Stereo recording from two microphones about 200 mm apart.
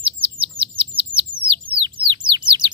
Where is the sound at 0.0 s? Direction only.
25° right (ahead or behind).